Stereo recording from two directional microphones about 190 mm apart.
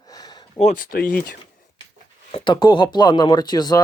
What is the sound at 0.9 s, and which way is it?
Speech, 50° left (ahead or behind).